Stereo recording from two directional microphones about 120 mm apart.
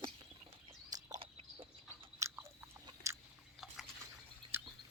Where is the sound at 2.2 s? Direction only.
25° right (ahead or behind).